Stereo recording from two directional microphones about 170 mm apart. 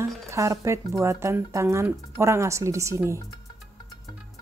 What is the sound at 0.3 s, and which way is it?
Speech, 15° right (ahead or behind).